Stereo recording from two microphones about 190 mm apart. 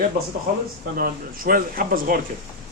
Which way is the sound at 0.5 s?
55° right (ahead or behind).